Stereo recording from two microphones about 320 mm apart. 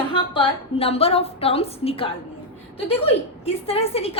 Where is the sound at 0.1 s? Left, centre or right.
Centre.